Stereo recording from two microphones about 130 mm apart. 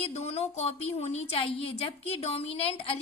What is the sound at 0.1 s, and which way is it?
A woman's voice, 55° left (ahead or behind).